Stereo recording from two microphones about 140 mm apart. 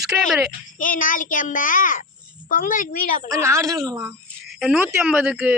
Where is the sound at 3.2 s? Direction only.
20° right (ahead or behind).